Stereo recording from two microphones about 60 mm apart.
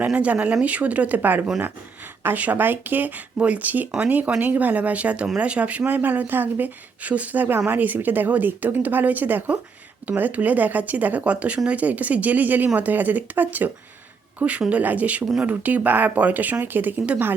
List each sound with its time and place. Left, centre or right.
0.1 s a woman's voice: right